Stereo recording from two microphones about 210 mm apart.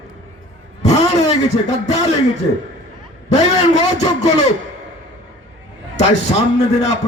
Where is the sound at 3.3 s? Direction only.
35° left (ahead or behind).